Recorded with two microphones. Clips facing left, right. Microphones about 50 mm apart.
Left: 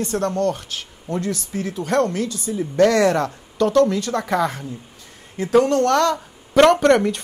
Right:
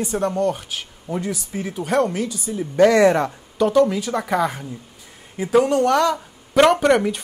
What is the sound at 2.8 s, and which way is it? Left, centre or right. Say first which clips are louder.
Speech: right 2 dB; centre.